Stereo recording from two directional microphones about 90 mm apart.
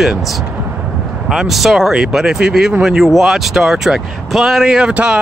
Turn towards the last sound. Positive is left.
turn(degrees=-10)  # may be behind; listen again after turning